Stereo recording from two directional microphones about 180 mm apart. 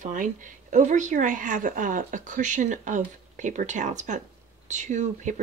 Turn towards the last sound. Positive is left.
turn(degrees=-40)  # may be behind; listen again after turning